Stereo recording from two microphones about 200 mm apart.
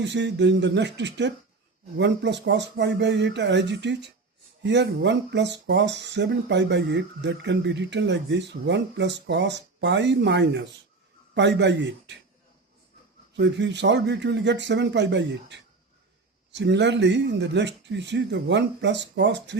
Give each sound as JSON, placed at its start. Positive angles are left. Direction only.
{"t": 0.0, "sound": "speech", "side_deg": -60}
{"t": 13.3, "sound": "speech", "side_deg": -60}